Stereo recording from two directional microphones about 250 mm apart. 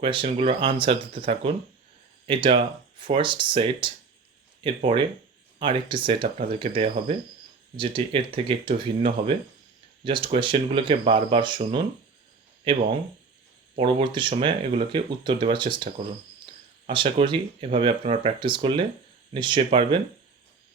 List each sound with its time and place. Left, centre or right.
0.0 s speech: right
13.7 s speech: centre